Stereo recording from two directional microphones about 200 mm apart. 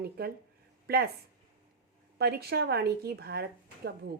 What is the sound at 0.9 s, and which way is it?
Speech, 50° right (ahead or behind).